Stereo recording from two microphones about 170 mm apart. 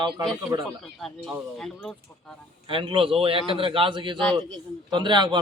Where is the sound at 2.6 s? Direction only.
30° right (ahead or behind).